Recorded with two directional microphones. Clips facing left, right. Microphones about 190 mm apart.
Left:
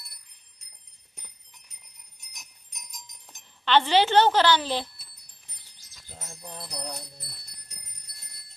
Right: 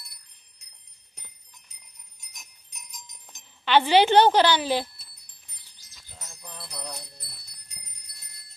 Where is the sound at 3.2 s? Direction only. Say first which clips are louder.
Left 1 dB; 10° right (ahead or behind).